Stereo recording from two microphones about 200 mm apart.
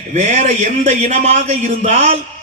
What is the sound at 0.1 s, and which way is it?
Speech, 35° right (ahead or behind).